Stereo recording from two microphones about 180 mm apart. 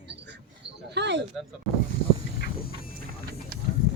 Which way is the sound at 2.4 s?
55° left (ahead or behind).